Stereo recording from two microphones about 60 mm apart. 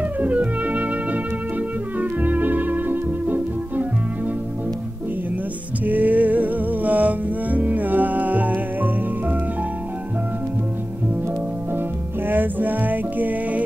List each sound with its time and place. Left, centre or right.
0.2 s music: right
5.9 s music: right
12.3 s music: right